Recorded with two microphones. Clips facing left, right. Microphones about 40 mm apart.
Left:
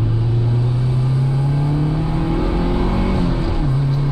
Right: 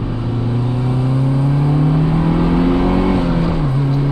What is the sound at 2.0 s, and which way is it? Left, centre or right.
Vehicle, right.